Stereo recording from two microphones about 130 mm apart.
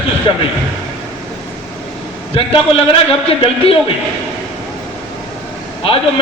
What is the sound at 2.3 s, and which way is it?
A man's voice, 45° left (ahead or behind).